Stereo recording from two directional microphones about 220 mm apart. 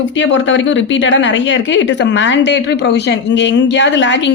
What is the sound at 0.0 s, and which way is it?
A woman's voice, 60° left (ahead or behind).